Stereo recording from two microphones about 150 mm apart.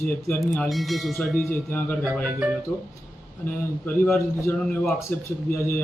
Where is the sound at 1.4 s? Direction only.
10° left (ahead or behind).